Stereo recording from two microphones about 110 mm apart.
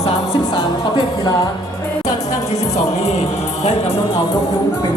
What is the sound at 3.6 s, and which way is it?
Music, 75° left (ahead or behind).